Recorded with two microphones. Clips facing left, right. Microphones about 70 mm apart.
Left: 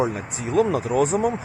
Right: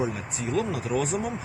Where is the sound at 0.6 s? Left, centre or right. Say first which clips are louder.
Left 8 dB; left.